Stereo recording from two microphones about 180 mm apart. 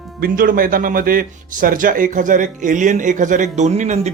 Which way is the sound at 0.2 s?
55° right (ahead or behind).